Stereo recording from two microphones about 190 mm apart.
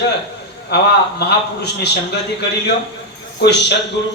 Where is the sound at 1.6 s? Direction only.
60° left (ahead or behind).